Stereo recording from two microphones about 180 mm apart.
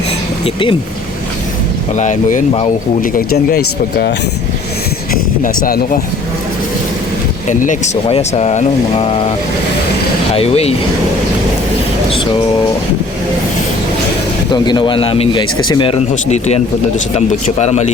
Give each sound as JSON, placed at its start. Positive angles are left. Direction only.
{"t": 0.4, "sound": "a man's voice", "side_deg": 30}
{"t": 2.0, "sound": "speech", "side_deg": 40}
{"t": 5.1, "sound": "speech", "side_deg": 50}
{"t": 7.4, "sound": "speech", "side_deg": 45}
{"t": 10.3, "sound": "speech", "side_deg": 35}
{"t": 14.5, "sound": "a man's voice", "side_deg": 25}